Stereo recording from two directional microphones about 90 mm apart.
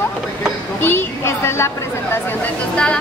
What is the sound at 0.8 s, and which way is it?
A woman's voice, 30° left (ahead or behind).